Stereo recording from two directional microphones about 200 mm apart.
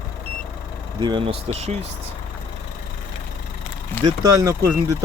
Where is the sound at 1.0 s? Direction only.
25° right (ahead or behind).